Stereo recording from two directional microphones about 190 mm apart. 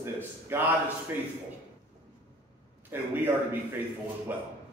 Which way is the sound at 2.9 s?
10° right (ahead or behind).